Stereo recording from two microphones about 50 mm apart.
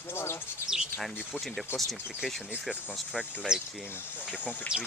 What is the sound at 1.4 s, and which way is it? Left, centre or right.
Speech, centre.